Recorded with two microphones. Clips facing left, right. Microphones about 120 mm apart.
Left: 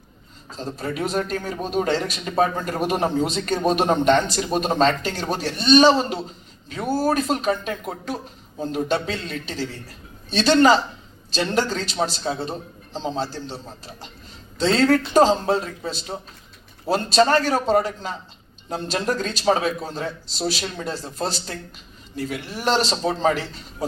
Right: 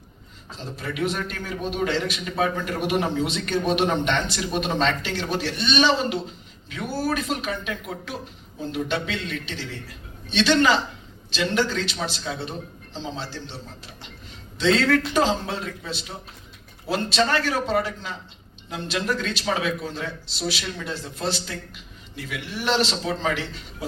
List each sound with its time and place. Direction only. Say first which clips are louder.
0.5 s a man's voice: left 4 dB; 40° left (ahead or behind)